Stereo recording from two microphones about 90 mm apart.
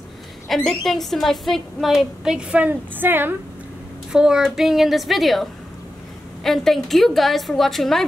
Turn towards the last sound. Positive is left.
turn(degrees=0)  # may be behind; listen again after turning